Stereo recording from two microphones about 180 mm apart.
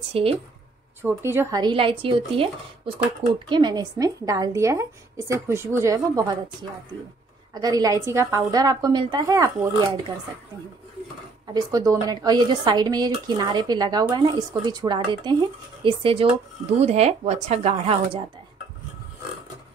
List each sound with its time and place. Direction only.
0.1 s speech: 30° right (ahead or behind)
1.0 s a woman's voice: 10° right (ahead or behind)
1.6 s a woman's voice: 30° right (ahead or behind)
7.5 s a woman's voice: 20° right (ahead or behind)
11.5 s a woman's voice: 20° right (ahead or behind)